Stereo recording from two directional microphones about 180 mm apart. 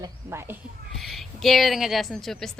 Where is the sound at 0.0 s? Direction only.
15° right (ahead or behind).